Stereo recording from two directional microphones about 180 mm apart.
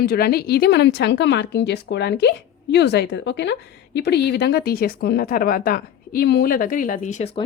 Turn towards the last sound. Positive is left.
turn(degrees=40)  # may be behind; listen again after turning